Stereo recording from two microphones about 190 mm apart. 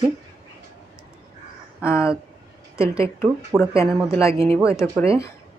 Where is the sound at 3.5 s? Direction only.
10° right (ahead or behind).